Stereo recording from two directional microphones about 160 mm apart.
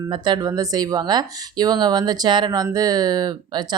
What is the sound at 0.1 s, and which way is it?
Speech, 25° right (ahead or behind).